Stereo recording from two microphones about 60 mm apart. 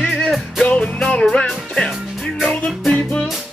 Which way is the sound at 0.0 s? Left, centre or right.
Centre.